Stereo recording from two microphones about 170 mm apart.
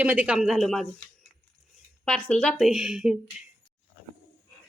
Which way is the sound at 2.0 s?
5° left (ahead or behind).